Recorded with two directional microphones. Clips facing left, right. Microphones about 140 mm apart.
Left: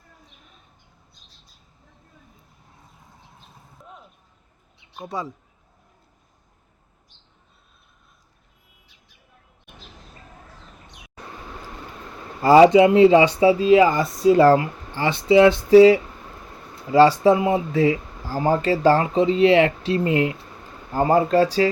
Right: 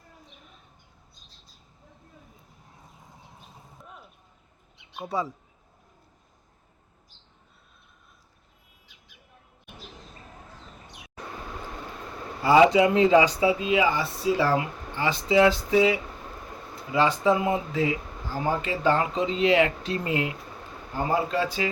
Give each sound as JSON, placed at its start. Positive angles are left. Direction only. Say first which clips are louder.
{"t": 3.8, "sound": "a sound", "louder": "left 4 dB", "side_deg": 0}
{"t": 4.9, "sound": "speech", "louder": "right 1 dB", "side_deg": 0}
{"t": 12.4, "sound": "speech", "louder": "left 6 dB", "side_deg": 40}
{"t": 15.3, "sound": "speech", "louder": "left 8 dB", "side_deg": 30}
{"t": 20.9, "sound": "speech", "louder": "left 8 dB", "side_deg": 45}